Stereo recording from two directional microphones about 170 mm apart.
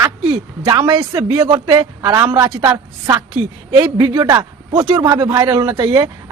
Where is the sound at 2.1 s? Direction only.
15° right (ahead or behind).